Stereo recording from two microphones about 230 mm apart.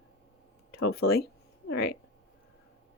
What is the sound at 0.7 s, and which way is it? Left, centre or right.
Speech, left.